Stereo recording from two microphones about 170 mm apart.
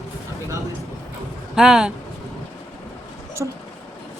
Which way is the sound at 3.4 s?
15° right (ahead or behind).